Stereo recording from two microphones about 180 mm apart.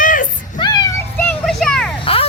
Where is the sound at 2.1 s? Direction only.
30° left (ahead or behind).